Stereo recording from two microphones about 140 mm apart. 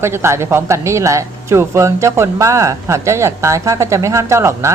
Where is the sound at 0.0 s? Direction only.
20° right (ahead or behind).